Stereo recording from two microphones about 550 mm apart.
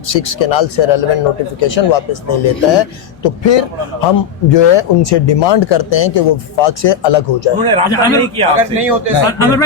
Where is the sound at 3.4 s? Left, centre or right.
Left.